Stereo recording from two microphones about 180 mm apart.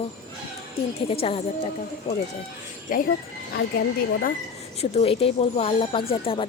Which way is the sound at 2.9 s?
50° left (ahead or behind).